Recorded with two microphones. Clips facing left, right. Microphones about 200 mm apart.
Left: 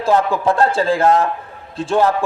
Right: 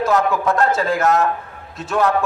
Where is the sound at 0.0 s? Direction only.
30° left (ahead or behind).